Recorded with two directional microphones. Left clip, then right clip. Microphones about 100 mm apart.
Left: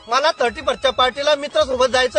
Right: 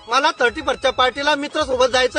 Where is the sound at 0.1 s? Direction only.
30° right (ahead or behind).